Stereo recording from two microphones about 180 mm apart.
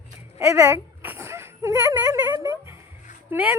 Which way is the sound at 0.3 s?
15° right (ahead or behind).